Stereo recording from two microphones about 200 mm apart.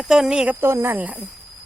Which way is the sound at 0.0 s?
5° right (ahead or behind).